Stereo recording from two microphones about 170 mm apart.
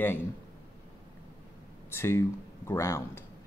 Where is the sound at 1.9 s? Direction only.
15° left (ahead or behind).